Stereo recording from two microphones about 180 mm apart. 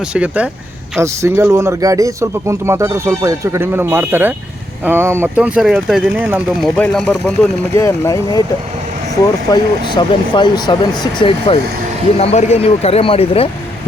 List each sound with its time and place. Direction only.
0.1 s speech: 5° right (ahead or behind)
6.7 s speech: 5° left (ahead or behind)
7.7 s speech: 15° left (ahead or behind)
9.5 s speech: 25° left (ahead or behind)